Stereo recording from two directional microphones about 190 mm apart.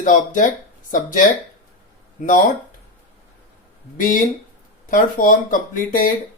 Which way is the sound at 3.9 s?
45° left (ahead or behind).